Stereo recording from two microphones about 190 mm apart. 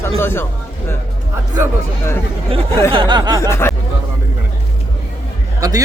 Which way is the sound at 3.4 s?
15° left (ahead or behind).